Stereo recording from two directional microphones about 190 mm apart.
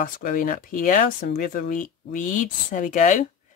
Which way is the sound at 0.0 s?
50° left (ahead or behind).